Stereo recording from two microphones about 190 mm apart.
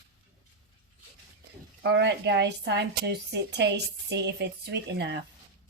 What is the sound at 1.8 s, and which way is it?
A woman's voice, 65° right (ahead or behind).